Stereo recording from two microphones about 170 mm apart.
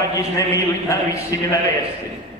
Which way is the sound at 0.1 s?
15° left (ahead or behind).